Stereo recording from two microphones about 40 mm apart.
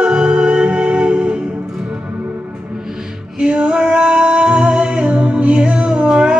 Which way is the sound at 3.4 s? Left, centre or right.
Right.